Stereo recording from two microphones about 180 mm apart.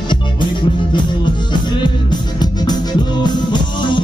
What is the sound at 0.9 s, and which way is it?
Music, 25° left (ahead or behind).